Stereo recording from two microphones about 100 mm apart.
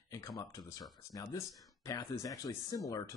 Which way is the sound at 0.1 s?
35° left (ahead or behind).